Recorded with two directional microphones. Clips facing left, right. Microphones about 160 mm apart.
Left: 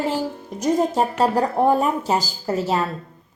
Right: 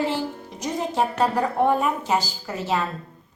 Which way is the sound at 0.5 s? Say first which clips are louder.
Left 6 dB; 45° left (ahead or behind).